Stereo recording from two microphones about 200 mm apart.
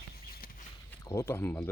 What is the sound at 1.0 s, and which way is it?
Speech, 15° left (ahead or behind).